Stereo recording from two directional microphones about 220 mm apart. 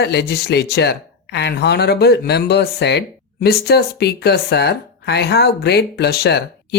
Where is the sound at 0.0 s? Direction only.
50° left (ahead or behind).